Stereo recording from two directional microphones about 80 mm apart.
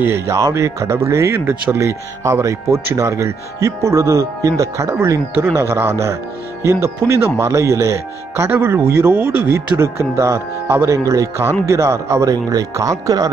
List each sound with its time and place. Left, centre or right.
0.0 s speech: right
12.3 s speech: right